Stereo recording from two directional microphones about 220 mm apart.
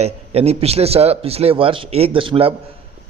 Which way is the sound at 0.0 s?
30° right (ahead or behind).